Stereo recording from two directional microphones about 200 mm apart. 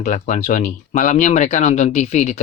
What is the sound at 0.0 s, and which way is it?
Speech, 40° left (ahead or behind).